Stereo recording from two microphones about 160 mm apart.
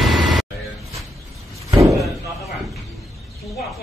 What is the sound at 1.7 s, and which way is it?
Slam, 20° right (ahead or behind).